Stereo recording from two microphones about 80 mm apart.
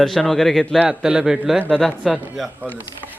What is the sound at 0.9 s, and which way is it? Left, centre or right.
A man's voice, centre.